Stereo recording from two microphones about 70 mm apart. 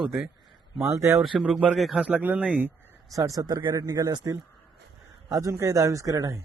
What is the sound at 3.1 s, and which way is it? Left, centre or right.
Speech, right.